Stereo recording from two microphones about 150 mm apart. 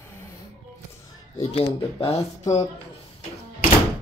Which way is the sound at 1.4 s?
40° left (ahead or behind).